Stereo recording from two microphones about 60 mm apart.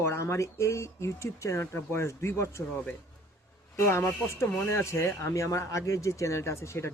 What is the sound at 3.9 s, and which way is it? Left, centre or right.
Speech, left.